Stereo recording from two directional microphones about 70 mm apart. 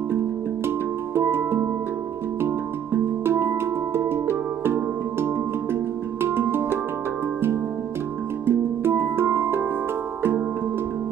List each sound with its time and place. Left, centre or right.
0.7 s music: right
8.5 s music: right